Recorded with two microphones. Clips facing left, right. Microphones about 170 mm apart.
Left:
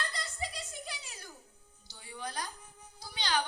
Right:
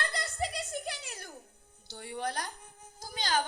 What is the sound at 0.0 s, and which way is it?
Music, 65° right (ahead or behind).